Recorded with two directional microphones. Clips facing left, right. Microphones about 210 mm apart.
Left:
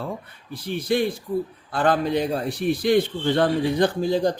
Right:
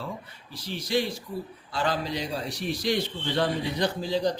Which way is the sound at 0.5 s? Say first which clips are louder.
Left 5 dB; 55° left (ahead or behind).